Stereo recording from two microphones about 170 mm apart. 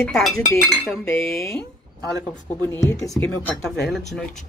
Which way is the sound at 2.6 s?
15° left (ahead or behind).